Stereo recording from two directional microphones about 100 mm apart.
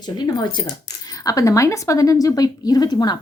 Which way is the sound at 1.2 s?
35° left (ahead or behind).